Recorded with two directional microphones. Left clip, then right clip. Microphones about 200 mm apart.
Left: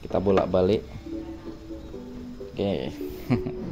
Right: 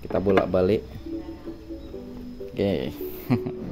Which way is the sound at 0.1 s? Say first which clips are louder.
Right 1 dB; 10° right (ahead or behind).